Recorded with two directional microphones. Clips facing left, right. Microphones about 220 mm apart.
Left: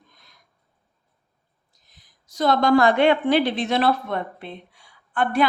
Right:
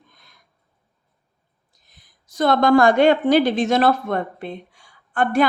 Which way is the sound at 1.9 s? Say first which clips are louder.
Right 2 dB; 55° right (ahead or behind).